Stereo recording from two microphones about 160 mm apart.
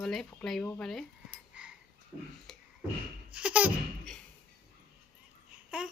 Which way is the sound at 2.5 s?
5° left (ahead or behind).